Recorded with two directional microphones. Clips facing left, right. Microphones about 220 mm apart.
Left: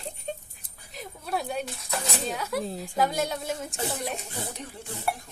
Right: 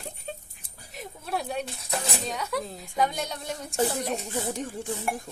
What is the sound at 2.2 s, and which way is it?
A woman's voice, centre (ahead or behind).